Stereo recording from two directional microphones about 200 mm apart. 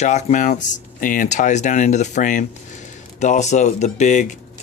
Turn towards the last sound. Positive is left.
turn(degrees=35)  # may be behind; listen again after turning